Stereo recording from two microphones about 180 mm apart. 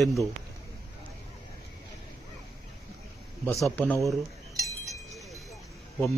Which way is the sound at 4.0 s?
15° right (ahead or behind).